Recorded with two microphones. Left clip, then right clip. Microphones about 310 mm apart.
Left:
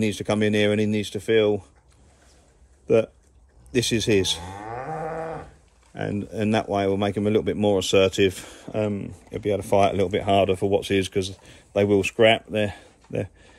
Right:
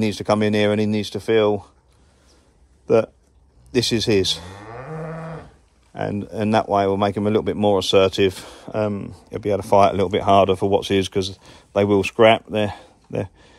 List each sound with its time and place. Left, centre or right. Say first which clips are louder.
0.0 s speech: right 4 dB; centre
2.9 s speech: right 3 dB; centre
4.6 s cattle: left 3 dB; centre
5.9 s speech: right 3 dB; centre